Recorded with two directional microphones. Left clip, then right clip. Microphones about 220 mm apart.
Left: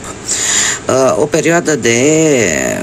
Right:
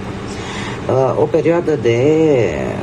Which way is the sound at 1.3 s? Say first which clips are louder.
Left 2 dB; 50° left (ahead or behind).